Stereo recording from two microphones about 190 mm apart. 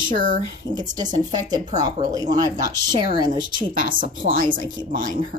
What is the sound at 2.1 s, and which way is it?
Speech, 20° right (ahead or behind).